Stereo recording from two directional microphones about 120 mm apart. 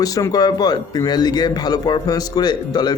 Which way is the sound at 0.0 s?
30° left (ahead or behind).